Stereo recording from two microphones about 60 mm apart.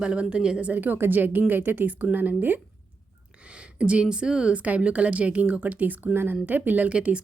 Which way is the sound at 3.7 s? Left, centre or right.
Centre.